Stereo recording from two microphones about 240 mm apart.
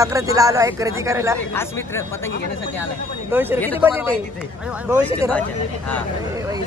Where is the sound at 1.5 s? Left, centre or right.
Centre.